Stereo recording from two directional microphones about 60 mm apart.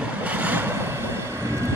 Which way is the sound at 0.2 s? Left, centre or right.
Right.